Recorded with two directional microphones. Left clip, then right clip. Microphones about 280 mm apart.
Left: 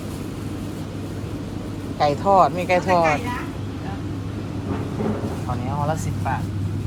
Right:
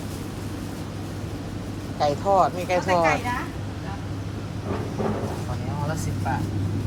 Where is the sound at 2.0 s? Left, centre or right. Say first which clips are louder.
Left 4 dB; centre.